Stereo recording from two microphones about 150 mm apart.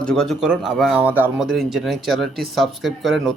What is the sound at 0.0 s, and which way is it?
Speech, 5° left (ahead or behind).